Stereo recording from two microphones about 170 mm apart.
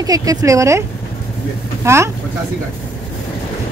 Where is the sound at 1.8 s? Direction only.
15° right (ahead or behind).